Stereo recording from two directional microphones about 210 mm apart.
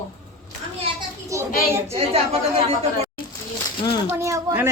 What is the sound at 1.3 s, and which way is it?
Speech, 15° right (ahead or behind).